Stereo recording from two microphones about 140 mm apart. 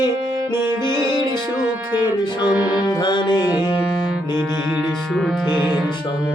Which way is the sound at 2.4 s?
10° right (ahead or behind).